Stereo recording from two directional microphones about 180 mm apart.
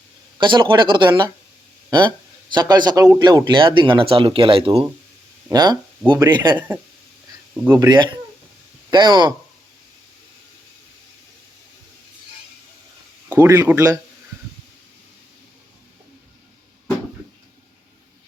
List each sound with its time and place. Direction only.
0.3 s a man's voice: 25° right (ahead or behind)
7.5 s speech: 10° right (ahead or behind)
7.9 s a man's voice: 25° right (ahead or behind)
13.2 s speech: 10° right (ahead or behind)